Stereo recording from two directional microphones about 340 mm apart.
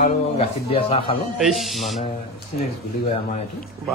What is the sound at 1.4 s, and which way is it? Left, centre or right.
Speech, centre.